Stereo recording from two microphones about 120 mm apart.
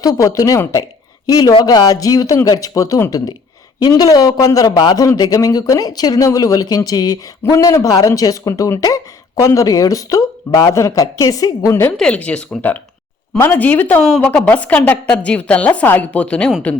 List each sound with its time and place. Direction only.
0.0 s a man's voice: 30° left (ahead or behind)
11.9 s a woman's voice: 10° left (ahead or behind)